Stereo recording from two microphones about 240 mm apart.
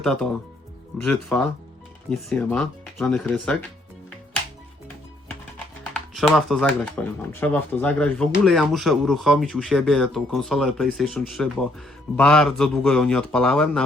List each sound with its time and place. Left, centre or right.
0.0 s speech: centre
6.1 s speech: centre